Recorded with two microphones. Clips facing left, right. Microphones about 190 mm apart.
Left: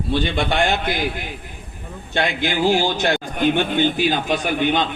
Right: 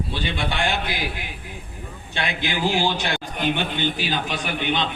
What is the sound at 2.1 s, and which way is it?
A man's voice, 45° left (ahead or behind).